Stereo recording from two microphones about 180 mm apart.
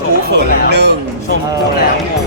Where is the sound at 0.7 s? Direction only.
70° right (ahead or behind).